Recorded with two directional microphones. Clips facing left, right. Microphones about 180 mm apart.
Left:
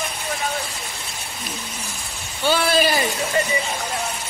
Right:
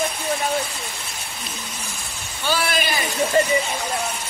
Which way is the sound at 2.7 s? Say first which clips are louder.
Left 5 dB; 35° left (ahead or behind).